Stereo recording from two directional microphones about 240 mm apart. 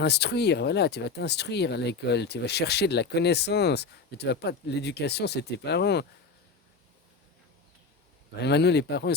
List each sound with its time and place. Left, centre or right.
0.0 s speech: left
8.4 s speech: left